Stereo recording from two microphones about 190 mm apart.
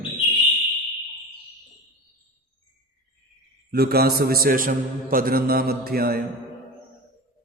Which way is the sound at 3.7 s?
55° right (ahead or behind).